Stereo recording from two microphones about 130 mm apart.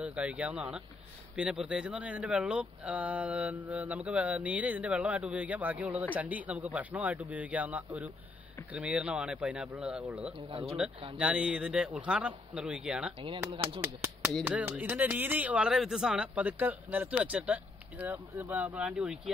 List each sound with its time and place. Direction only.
0.0 s speech: 10° right (ahead or behind)
13.7 s speech: 20° right (ahead or behind)